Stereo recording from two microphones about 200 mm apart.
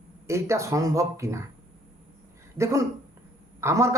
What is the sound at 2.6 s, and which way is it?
Speech, 15° right (ahead or behind).